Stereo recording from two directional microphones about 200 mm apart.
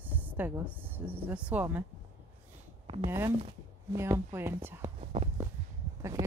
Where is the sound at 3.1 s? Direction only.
15° right (ahead or behind).